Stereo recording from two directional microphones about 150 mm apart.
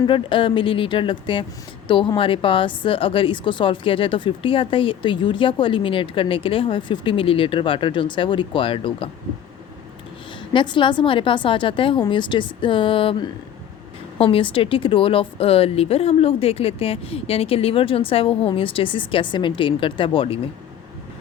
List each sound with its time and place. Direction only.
0.1 s speech: 35° left (ahead or behind)
10.5 s speech: 35° left (ahead or behind)